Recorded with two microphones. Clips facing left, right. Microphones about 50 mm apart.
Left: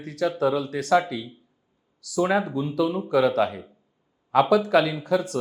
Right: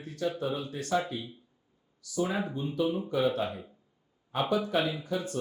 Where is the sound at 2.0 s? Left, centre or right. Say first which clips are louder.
Left 8 dB; left.